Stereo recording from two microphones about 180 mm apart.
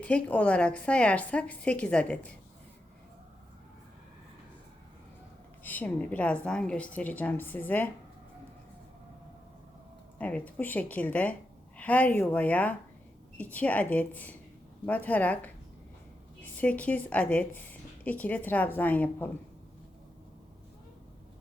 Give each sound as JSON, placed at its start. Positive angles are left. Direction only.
{"t": 0.0, "sound": "a woman's voice", "side_deg": 5}
{"t": 5.6, "sound": "a woman's voice", "side_deg": 10}
{"t": 10.2, "sound": "a woman's voice", "side_deg": 10}